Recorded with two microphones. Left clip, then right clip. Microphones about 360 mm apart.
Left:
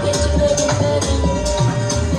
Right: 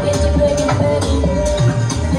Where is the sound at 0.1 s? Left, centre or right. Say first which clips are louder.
Right 1 dB; centre.